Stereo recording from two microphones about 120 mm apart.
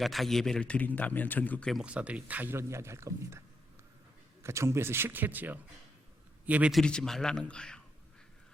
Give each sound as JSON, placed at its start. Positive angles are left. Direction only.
{"t": 0.0, "sound": "a man's voice", "side_deg": 0}
{"t": 1.7, "sound": "a man's voice", "side_deg": -10}
{"t": 4.4, "sound": "a man's voice", "side_deg": -25}
{"t": 6.7, "sound": "a man's voice", "side_deg": 5}